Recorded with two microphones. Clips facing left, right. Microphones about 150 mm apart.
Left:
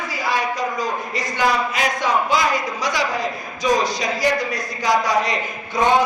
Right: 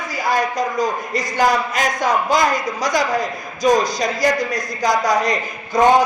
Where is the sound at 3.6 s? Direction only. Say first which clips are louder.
Right 3 dB; 40° right (ahead or behind).